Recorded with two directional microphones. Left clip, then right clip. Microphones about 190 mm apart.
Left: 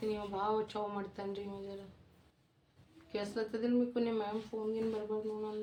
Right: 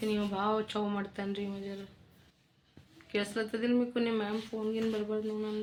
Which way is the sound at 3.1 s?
20° right (ahead or behind).